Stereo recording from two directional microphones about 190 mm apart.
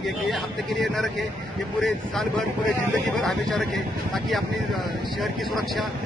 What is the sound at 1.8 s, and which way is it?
Speech, centre (ahead or behind).